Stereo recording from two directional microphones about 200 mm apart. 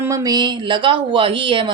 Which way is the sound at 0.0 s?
15° right (ahead or behind).